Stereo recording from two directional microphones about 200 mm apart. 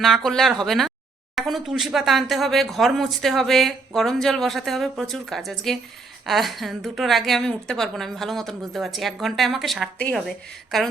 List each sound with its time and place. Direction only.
0.0 s a woman's voice: centre (ahead or behind)